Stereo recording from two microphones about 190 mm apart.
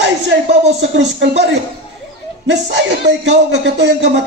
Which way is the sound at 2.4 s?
70° right (ahead or behind).